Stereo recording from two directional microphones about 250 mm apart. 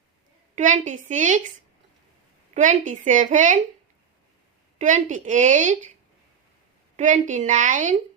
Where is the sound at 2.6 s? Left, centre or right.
Right.